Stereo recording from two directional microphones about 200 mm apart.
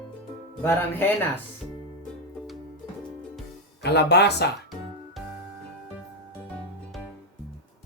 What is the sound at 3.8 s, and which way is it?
Speech, 55° left (ahead or behind).